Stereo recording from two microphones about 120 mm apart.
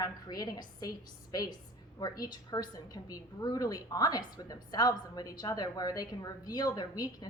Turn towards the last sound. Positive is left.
turn(degrees=35)  # may be behind; listen again after turning